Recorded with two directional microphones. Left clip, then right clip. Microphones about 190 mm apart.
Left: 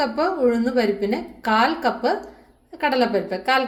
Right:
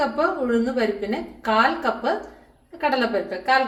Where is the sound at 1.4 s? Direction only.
40° left (ahead or behind).